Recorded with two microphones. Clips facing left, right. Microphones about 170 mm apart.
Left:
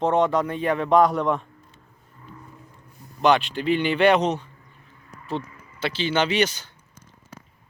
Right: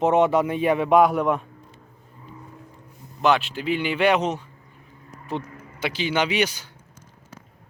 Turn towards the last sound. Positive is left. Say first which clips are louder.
# left 1 dB
turn(degrees=-10)  # may be behind; listen again after turning